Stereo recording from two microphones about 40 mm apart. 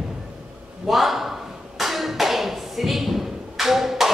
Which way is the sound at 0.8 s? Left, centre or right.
Centre.